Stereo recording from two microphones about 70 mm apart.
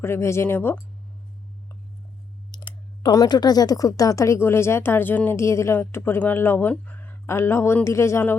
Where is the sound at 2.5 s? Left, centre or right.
Left.